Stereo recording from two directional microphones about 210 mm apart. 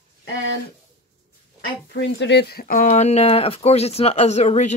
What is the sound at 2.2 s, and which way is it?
Speech, 55° left (ahead or behind).